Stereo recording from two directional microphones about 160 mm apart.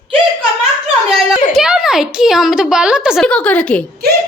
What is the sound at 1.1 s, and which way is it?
A child's voice, 5° right (ahead or behind).